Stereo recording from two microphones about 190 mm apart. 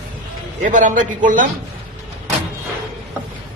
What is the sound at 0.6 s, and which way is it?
Speech, 45° right (ahead or behind).